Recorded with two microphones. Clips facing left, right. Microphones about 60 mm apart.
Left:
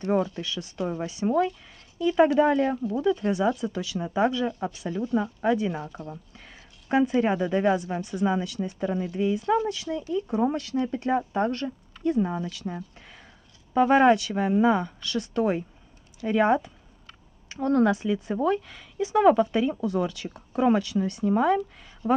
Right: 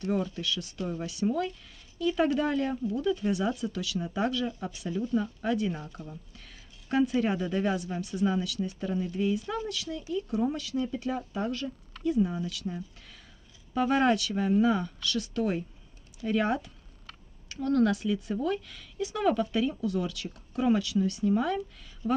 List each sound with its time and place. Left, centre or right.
0.1 s speech: left
4.5 s speech: left
5.1 s speech: left
6.3 s a sound: left
7.2 s speech: left
9.0 s speech: centre
10.4 s speech: left
13.7 s speech: left